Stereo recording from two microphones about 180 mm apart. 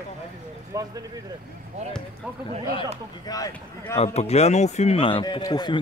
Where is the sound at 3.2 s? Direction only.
20° left (ahead or behind).